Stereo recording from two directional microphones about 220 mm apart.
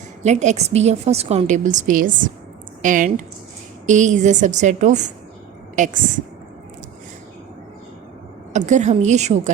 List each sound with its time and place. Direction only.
0.2 s a woman's voice: 30° right (ahead or behind)
8.5 s a woman's voice: 35° right (ahead or behind)